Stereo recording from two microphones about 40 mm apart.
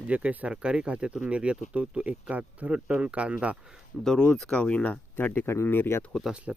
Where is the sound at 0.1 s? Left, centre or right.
Right.